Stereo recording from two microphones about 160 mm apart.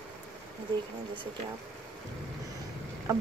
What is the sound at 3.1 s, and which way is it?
Boat, 20° right (ahead or behind).